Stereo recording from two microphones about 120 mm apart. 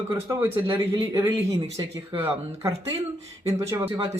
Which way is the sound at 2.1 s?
50° right (ahead or behind).